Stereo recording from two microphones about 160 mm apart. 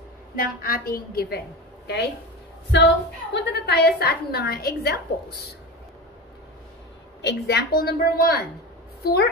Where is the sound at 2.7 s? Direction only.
90° left.